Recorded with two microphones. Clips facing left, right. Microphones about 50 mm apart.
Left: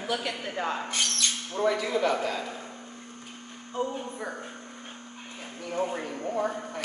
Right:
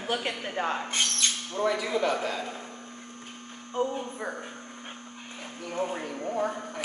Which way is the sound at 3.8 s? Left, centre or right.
Right.